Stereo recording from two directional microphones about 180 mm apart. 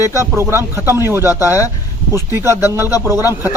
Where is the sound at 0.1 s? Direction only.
15° right (ahead or behind).